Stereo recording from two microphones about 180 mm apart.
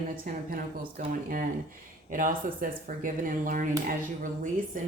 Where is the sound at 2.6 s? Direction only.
50° right (ahead or behind).